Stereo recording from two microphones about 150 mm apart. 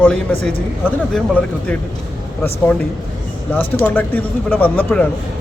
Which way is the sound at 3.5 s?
10° left (ahead or behind).